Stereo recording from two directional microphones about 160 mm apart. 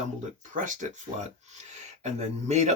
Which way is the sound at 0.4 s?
55° right (ahead or behind).